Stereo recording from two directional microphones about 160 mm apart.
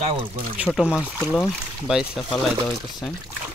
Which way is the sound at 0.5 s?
Centre (ahead or behind).